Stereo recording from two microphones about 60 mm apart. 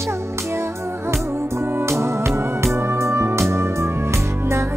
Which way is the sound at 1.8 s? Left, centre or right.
Right.